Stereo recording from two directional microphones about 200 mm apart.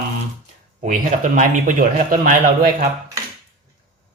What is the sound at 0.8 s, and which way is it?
Speech, 40° right (ahead or behind).